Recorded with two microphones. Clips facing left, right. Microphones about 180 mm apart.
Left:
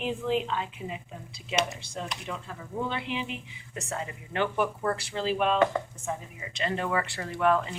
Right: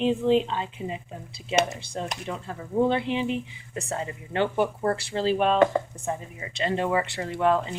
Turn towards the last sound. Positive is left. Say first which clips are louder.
# right 2 dB
turn(degrees=-25)  # may be behind; listen again after turning